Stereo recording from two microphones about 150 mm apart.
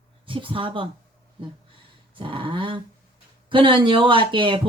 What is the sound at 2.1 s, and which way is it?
Speech, 35° right (ahead or behind).